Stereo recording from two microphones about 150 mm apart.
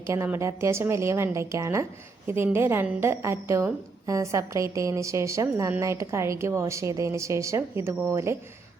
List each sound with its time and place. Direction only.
0.1 s a woman's voice: 20° right (ahead or behind)